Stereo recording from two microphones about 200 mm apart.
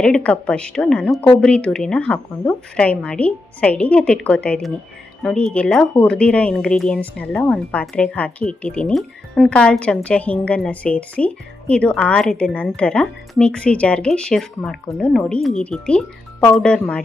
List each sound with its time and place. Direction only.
0.0 s speech: 5° left (ahead or behind)